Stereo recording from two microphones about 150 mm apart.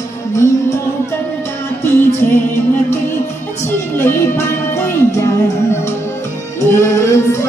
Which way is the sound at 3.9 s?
15° left (ahead or behind).